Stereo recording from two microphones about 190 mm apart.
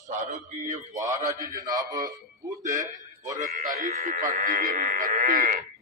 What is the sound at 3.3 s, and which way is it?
Speech, 45° right (ahead or behind).